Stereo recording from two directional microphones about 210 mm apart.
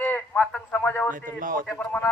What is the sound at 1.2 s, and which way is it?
Speech, 40° right (ahead or behind).